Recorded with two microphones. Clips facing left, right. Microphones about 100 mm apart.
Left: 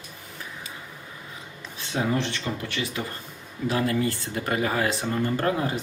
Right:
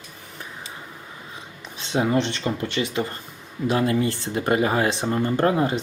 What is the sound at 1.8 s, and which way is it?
Speech, 20° right (ahead or behind).